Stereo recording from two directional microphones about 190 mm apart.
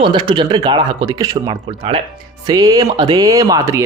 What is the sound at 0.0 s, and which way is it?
Speech, 25° right (ahead or behind).